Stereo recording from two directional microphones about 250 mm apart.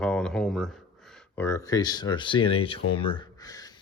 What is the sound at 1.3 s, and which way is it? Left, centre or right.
Speech, centre.